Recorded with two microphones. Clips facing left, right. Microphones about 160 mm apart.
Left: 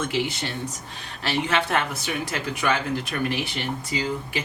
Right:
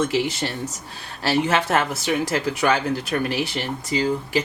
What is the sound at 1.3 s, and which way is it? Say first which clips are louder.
Speech: right 4 dB; 40° right (ahead or behind).